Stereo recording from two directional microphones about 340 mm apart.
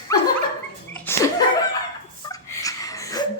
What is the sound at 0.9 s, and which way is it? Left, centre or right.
Laughter, centre.